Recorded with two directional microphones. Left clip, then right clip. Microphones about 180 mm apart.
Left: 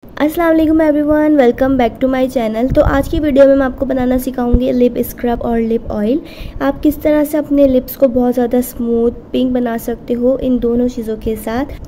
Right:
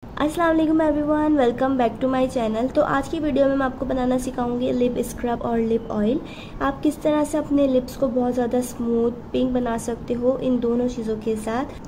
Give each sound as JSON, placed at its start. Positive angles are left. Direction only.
{"t": 0.2, "sound": "a woman's voice", "side_deg": 30}